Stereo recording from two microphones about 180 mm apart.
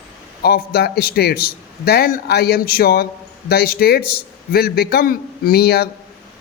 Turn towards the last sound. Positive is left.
turn(degrees=60)  # may be behind; listen again after turning